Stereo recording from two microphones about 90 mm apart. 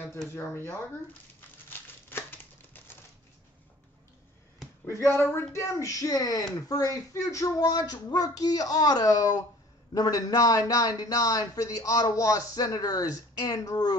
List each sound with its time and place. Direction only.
0.3 s speech: 25° left (ahead or behind)
1.7 s crumpling: 25° left (ahead or behind)
5.1 s speech: 30° left (ahead or behind); by 13.9 s 45° left (ahead or behind)